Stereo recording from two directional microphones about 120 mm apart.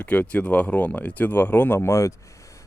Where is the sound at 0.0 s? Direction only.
10° left (ahead or behind).